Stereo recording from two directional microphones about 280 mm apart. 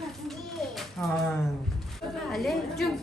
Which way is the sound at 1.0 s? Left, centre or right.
Centre.